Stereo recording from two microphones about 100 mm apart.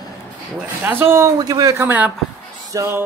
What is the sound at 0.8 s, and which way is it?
Speech, 20° right (ahead or behind).